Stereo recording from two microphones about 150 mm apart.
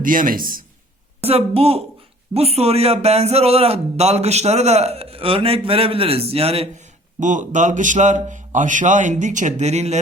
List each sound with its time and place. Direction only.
0.0 s a man's voice: 65° right (ahead or behind)
1.2 s a woman's voice: 40° right (ahead or behind)